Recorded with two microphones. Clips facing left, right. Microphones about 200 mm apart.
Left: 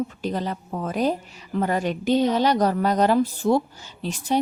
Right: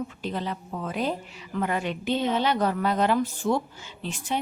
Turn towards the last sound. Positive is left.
turn(degrees=40)  # may be behind; listen again after turning